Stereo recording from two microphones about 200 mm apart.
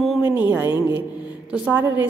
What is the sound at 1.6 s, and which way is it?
Speech, 10° right (ahead or behind).